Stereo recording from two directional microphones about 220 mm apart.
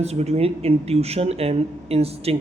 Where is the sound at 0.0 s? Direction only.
30° right (ahead or behind).